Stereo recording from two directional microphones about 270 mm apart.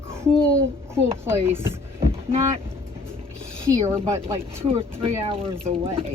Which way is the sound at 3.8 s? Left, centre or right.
Centre.